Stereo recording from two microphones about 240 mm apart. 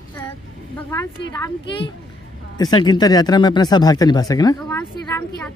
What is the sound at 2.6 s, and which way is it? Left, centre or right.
Speech, centre.